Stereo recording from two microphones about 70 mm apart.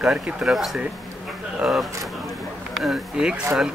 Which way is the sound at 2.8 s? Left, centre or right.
Centre.